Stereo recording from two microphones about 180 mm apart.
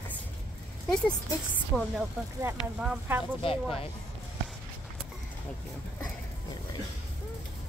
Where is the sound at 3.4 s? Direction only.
30° left (ahead or behind).